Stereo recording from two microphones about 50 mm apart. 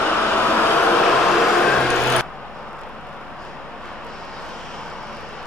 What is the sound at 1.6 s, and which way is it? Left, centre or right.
Vehicle, centre.